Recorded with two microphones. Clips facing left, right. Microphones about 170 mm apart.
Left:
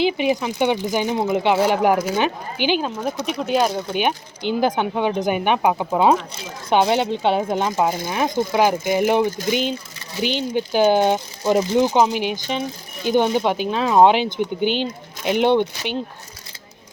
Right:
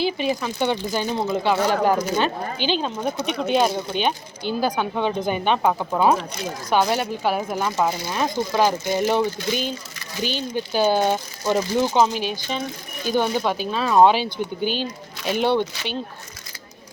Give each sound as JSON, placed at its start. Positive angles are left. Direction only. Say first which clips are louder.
{"t": 0.0, "sound": "speech", "louder": "left 4 dB", "side_deg": 15}
{"t": 3.0, "sound": "speech", "louder": "even", "side_deg": 0}
{"t": 4.0, "sound": "speech", "louder": "left 2 dB", "side_deg": 20}